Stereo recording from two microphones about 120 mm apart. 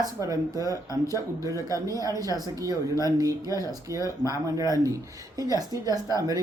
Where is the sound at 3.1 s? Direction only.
30° right (ahead or behind).